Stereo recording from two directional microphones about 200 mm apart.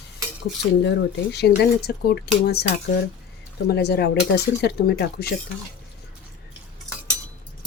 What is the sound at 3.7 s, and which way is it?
A woman's voice, 55° left (ahead or behind).